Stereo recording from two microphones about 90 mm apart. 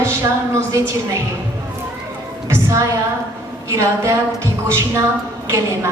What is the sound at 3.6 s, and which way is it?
A woman's voice, 35° right (ahead or behind).